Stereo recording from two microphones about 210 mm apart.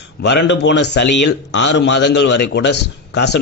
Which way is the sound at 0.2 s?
55° left (ahead or behind).